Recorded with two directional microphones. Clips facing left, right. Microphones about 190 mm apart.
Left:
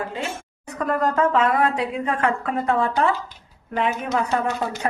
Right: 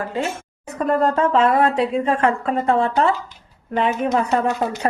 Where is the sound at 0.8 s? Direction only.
25° right (ahead or behind).